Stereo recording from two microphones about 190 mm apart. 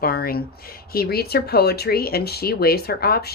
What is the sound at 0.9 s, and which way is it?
Speech, 55° left (ahead or behind).